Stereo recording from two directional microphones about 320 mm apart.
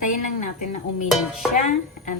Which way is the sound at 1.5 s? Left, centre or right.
Left.